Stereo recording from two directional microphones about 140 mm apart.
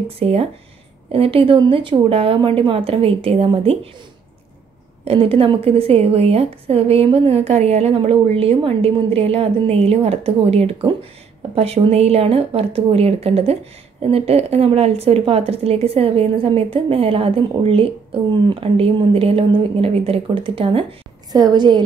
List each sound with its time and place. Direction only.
0.2 s a woman's voice: 45° right (ahead or behind)
5.0 s a woman's voice: 40° right (ahead or behind)
21.3 s speech: 30° right (ahead or behind)